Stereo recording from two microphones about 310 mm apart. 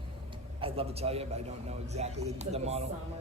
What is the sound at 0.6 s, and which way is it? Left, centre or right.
A man's voice, centre.